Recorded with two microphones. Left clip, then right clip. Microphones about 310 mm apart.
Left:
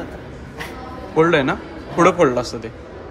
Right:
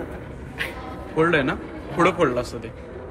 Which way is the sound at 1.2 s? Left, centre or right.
Centre.